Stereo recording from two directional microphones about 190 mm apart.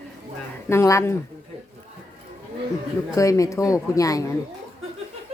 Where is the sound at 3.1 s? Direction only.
15° left (ahead or behind).